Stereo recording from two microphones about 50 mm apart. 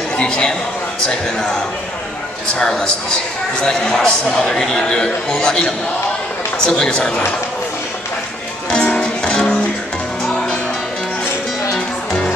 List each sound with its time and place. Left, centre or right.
0.2 s a man's voice: centre
2.6 s a man's voice: centre
8.6 s music: left
12.1 s music: centre